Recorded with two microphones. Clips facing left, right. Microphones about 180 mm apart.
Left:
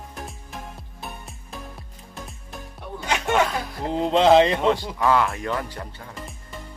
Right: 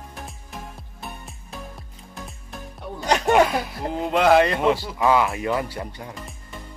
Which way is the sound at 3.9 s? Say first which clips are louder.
Left 2 dB; 25° left (ahead or behind).